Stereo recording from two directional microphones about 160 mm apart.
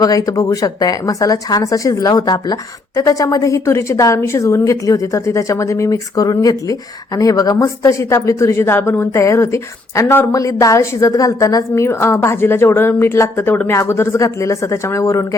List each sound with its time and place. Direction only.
0.0 s speech: 20° left (ahead or behind)